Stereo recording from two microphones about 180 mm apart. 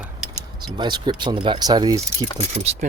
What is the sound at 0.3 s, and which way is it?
Speech, 25° right (ahead or behind).